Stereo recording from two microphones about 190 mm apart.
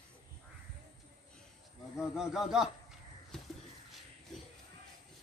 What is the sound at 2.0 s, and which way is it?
Speech, 5° right (ahead or behind).